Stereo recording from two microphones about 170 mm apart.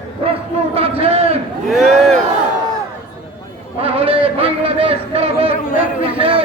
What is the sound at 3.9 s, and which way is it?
A man's voice, 35° right (ahead or behind).